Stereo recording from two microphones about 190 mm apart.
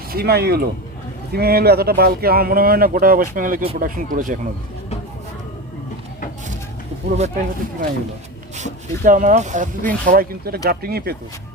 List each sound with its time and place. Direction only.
0.1 s speech: 55° right (ahead or behind)
7.2 s speech: 45° right (ahead or behind)